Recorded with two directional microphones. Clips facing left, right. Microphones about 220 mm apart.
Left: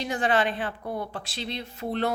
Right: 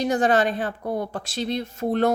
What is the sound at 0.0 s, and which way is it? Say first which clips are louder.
Speech: right 5 dB; 45° right (ahead or behind).